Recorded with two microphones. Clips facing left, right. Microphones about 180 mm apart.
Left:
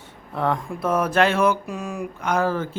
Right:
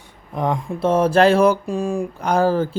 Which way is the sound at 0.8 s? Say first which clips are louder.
Right 6 dB; 25° right (ahead or behind).